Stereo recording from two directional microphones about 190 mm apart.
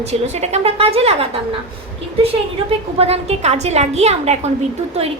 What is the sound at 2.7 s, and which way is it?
A woman's voice, 30° right (ahead or behind).